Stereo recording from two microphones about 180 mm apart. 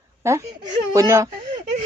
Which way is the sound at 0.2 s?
15° right (ahead or behind).